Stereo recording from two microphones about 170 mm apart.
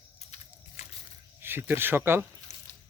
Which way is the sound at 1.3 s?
10° right (ahead or behind).